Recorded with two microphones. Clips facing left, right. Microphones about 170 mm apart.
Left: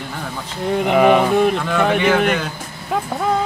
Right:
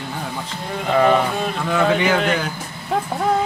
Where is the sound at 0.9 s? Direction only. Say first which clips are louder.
Left 2 dB; 15° left (ahead or behind).